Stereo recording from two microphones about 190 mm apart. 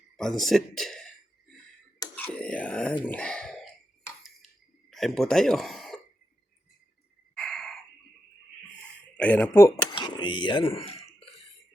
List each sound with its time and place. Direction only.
0.2 s speech: centre (ahead or behind)
2.1 s a sound: 10° left (ahead or behind)
4.9 s speech: centre (ahead or behind)
7.3 s a sound: 5° left (ahead or behind)
9.1 s speech: 5° left (ahead or behind)
9.9 s speech: 25° left (ahead or behind)